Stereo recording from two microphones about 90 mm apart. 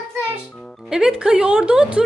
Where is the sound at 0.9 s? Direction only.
5° right (ahead or behind).